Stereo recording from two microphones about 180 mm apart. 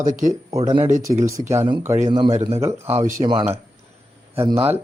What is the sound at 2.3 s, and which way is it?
Speech, 40° right (ahead or behind).